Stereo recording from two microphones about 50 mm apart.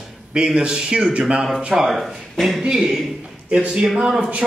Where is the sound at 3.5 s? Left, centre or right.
Right.